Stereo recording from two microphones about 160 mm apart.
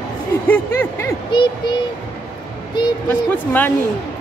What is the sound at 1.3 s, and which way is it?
Child singing, 30° left (ahead or behind).